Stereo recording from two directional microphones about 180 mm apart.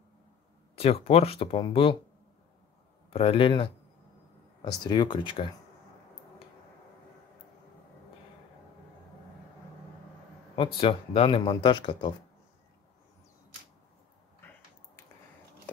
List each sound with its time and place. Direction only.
0.7 s speech: 35° left (ahead or behind)
3.1 s speech: 30° left (ahead or behind)
10.8 s speech: 30° left (ahead or behind)